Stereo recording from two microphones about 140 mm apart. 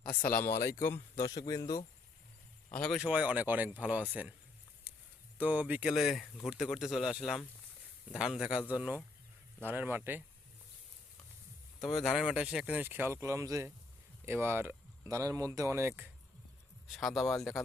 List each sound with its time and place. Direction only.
0.2 s speech: 15° left (ahead or behind)
2.7 s speech: 5° left (ahead or behind)
3.0 s speech: 10° right (ahead or behind)
5.4 s speech: 10° right (ahead or behind)
11.8 s speech: centre (ahead or behind)
16.9 s speech: centre (ahead or behind)